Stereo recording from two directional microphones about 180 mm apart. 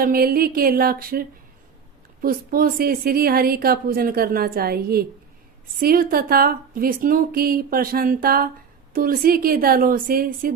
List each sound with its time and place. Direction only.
0.0 s a woman's voice: 55° right (ahead or behind)